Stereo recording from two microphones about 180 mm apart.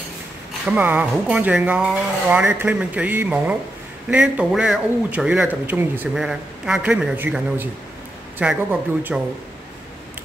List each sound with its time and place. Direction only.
0.7 s a man's voice: 10° right (ahead or behind)